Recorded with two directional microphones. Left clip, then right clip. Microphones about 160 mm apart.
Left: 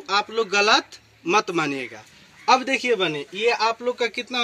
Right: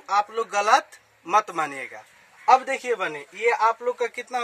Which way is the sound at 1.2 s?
15° right (ahead or behind).